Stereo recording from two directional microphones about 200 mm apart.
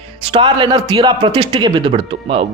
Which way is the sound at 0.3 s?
20° right (ahead or behind).